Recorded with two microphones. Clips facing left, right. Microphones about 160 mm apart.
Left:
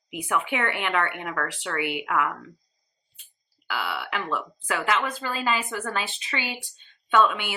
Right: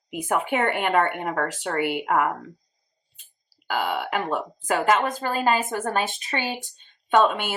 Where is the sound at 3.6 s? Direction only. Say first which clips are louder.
Right 5 dB; 45° right (ahead or behind).